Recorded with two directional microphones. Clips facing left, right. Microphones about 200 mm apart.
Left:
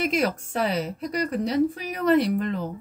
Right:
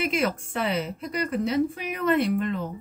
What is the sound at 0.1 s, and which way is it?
Speech, 35° left (ahead or behind).